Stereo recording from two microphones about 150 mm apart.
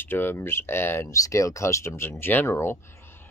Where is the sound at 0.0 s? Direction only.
15° left (ahead or behind).